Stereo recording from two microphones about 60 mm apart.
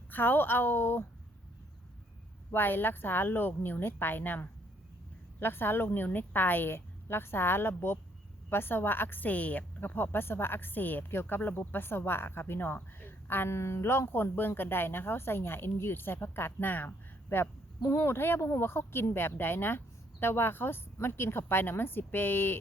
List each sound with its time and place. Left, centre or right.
0.1 s speech: left
2.5 s speech: left
13.5 s speech: left